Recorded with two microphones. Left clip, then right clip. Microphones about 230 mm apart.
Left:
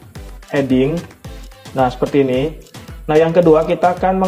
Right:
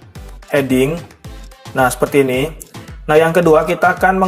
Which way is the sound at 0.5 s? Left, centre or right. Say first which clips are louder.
Right 2 dB; right.